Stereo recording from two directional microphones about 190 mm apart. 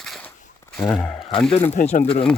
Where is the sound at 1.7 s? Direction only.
35° left (ahead or behind).